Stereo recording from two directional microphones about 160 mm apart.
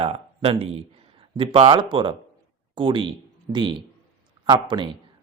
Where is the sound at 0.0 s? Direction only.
35° right (ahead or behind).